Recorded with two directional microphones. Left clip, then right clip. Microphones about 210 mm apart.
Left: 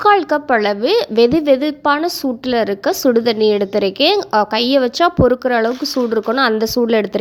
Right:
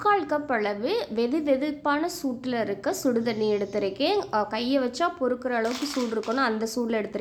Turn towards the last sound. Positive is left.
turn(degrees=40)  # may be behind; listen again after turning